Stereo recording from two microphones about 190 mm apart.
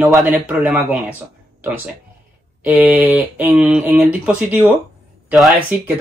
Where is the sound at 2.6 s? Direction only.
10° right (ahead or behind).